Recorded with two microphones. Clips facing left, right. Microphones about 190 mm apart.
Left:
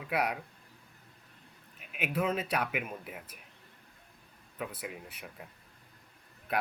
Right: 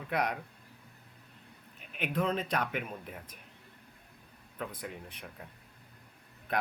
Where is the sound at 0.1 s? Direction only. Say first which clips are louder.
Even; 5° left (ahead or behind).